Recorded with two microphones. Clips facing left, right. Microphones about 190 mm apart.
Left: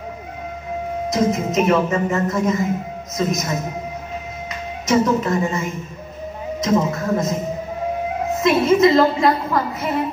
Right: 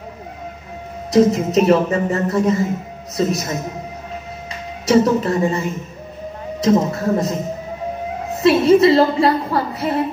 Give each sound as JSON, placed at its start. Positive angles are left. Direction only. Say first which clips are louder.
{"t": 1.1, "sound": "a woman's voice", "louder": "right 6 dB", "side_deg": -35}
{"t": 4.8, "sound": "a woman's voice", "louder": "right 3 dB", "side_deg": -35}
{"t": 6.6, "sound": "a woman's voice", "louder": "right 3 dB", "side_deg": -35}
{"t": 8.4, "sound": "a woman's voice", "louder": "right 3 dB", "side_deg": -35}